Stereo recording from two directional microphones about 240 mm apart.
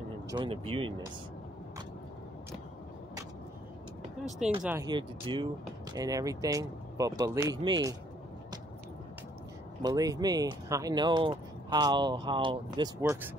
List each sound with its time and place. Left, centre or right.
0.3 s speech: right
4.6 s speech: centre
9.8 s speech: centre